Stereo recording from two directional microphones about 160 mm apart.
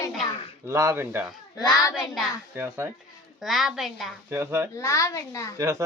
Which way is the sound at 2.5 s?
15° right (ahead or behind).